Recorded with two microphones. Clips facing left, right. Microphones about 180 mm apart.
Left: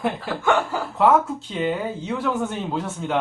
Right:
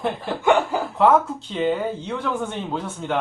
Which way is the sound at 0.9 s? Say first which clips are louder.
Even; centre (ahead or behind).